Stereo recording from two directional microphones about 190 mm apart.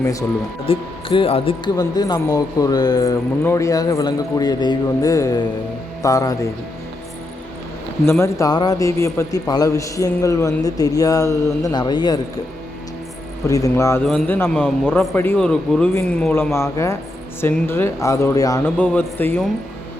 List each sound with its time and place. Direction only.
0.0 s a man's voice: 15° left (ahead or behind)
0.6 s a man's voice: 30° left (ahead or behind)
8.2 s a man's voice: 20° left (ahead or behind)
13.5 s a man's voice: 15° left (ahead or behind)
14.0 s a man's voice: 5° left (ahead or behind)